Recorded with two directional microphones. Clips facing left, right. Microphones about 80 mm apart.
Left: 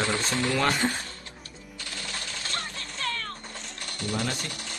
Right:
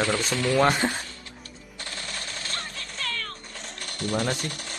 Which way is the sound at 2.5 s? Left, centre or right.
Left.